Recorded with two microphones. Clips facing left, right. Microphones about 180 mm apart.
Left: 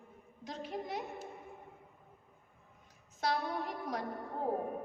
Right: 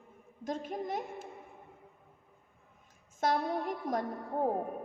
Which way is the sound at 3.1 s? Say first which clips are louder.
Right 4 dB; 50° right (ahead or behind).